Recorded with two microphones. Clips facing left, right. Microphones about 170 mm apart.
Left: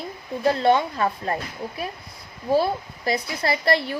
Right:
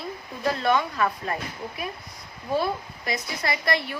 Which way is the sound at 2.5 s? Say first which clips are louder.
Left 5 dB; 30° left (ahead or behind).